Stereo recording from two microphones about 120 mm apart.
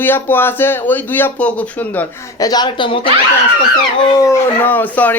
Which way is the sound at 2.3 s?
30° left (ahead or behind).